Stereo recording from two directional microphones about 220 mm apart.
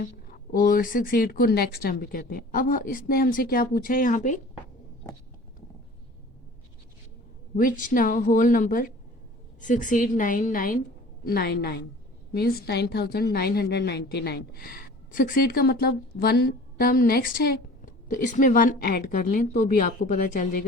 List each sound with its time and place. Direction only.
0.0 s speech: 40° left (ahead or behind)
7.5 s a woman's voice: 35° left (ahead or behind)